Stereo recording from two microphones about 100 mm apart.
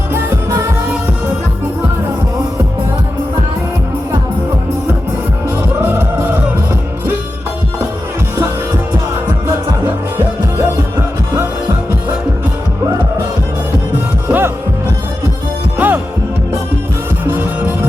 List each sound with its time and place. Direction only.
0.1 s music of asia: 25° right (ahead or behind)
5.8 s music: 20° right (ahead or behind)
14.3 s music: 25° right (ahead or behind)
15.8 s music: 20° right (ahead or behind)
17.2 s music: 20° right (ahead or behind)